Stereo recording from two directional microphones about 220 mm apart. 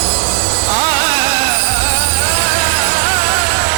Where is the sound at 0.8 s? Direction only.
10° right (ahead or behind).